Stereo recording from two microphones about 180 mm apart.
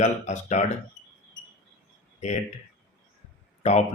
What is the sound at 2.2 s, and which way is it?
Speech, 40° left (ahead or behind).